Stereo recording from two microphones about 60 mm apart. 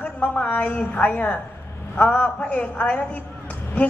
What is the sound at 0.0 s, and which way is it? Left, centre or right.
A woman's voice, left.